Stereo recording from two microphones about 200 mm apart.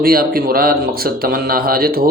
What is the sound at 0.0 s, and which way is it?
A man's voice, 50° right (ahead or behind).